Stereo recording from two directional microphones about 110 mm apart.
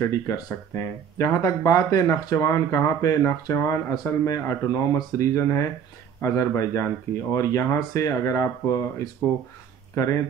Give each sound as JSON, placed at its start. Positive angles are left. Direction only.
{"t": 0.0, "sound": "speech", "side_deg": 30}